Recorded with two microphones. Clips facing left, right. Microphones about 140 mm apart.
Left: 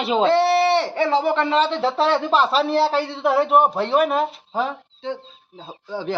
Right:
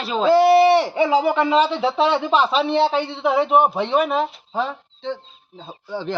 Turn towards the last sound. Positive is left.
turn(degrees=10)  # may be behind; listen again after turning